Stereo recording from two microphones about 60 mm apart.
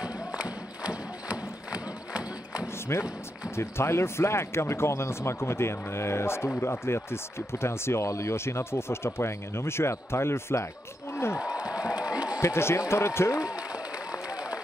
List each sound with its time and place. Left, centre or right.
0.0 s music: centre
2.9 s speech: left
8.1 s speech: left
11.6 s crowd: centre
12.4 s speech: left
14.1 s a sound: centre